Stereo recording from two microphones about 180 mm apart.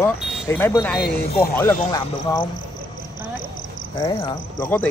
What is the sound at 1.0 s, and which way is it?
Speech, 60° left (ahead or behind).